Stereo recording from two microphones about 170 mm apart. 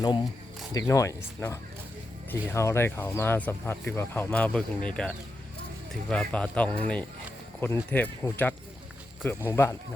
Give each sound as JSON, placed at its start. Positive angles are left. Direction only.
{"t": 0.7, "sound": "speech", "side_deg": 20}